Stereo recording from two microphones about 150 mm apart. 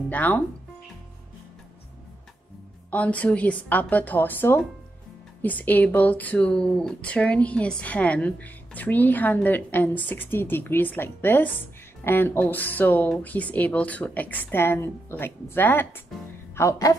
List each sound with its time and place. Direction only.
0.1 s speech: 10° left (ahead or behind)
2.9 s speech: 10° left (ahead or behind)